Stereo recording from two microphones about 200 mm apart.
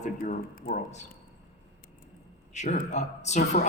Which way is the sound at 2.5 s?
35° left (ahead or behind).